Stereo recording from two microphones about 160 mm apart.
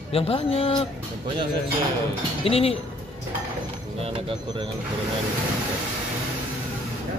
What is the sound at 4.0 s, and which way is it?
Speech, 35° right (ahead or behind).